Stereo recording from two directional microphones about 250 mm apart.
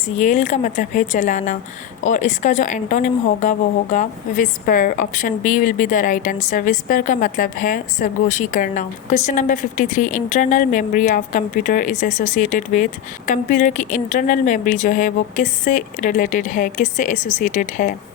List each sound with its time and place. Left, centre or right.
0.2 s a woman's voice: left